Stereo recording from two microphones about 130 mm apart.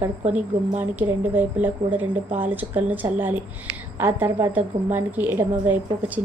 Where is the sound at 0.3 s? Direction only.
15° right (ahead or behind).